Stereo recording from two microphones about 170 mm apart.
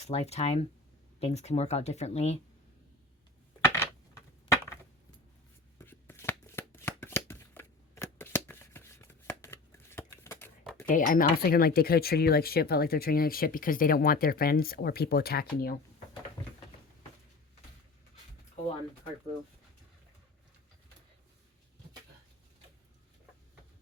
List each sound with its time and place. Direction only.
0.0 s speech: 40° left (ahead or behind)
3.6 s a sound: 15° left (ahead or behind)
5.8 s shuffling cards: 15° left (ahead or behind)
10.8 s speech: 55° left (ahead or behind)